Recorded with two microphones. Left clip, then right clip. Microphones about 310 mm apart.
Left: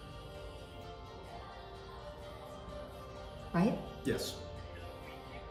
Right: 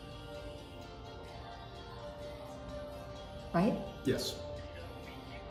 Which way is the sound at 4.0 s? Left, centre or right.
Left.